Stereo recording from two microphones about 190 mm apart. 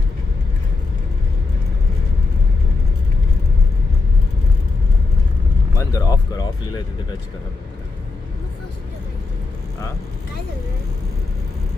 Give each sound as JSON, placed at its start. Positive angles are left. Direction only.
{"t": 5.7, "sound": "vehicle", "side_deg": 20}